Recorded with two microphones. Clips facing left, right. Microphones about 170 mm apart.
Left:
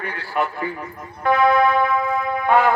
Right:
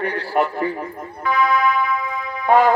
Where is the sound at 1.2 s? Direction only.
50° left (ahead or behind).